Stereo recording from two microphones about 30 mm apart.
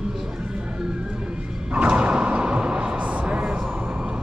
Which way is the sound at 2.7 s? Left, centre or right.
Right.